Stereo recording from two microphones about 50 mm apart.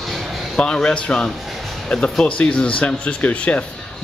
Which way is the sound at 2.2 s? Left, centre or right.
Left.